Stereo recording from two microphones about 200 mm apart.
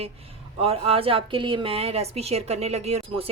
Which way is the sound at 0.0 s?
30° right (ahead or behind).